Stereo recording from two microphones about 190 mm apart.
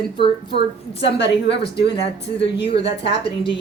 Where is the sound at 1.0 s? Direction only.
65° left (ahead or behind).